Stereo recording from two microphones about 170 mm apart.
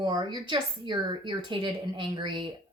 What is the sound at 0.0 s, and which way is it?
A woman's voice, 30° right (ahead or behind).